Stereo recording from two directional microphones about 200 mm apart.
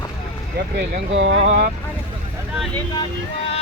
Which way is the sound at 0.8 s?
60° right (ahead or behind).